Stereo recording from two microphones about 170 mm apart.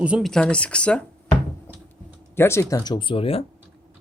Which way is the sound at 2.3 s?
15° left (ahead or behind).